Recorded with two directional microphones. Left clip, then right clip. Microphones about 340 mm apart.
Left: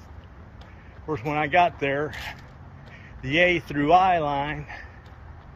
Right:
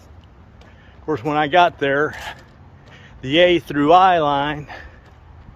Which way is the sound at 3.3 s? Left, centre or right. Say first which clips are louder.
Right 6 dB; centre.